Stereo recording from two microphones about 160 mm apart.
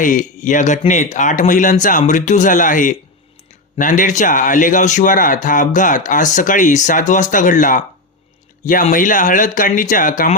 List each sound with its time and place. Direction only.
0.0 s a man's voice: 55° left (ahead or behind)